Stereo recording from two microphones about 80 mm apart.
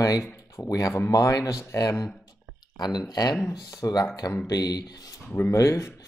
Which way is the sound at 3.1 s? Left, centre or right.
Left.